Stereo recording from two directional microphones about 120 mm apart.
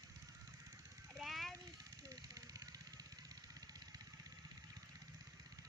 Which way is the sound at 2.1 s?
30° right (ahead or behind).